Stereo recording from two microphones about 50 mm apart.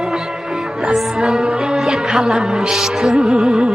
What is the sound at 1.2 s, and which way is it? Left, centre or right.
Music, centre.